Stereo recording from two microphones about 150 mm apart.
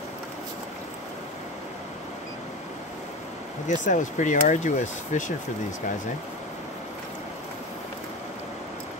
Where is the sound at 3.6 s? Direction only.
55° left (ahead or behind).